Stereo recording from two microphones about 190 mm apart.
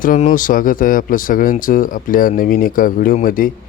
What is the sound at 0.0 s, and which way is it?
Speech, 45° left (ahead or behind).